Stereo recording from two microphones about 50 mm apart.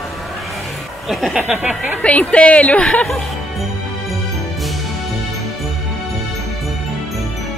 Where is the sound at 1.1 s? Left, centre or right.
Centre.